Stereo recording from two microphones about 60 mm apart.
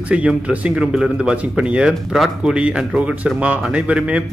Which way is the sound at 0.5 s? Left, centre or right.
Centre.